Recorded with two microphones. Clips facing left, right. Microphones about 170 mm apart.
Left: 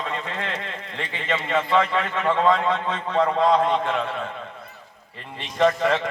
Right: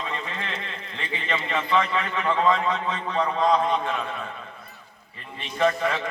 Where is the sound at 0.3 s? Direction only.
65° left (ahead or behind).